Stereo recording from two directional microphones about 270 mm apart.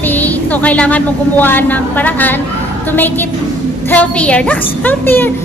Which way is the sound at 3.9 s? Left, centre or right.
Centre.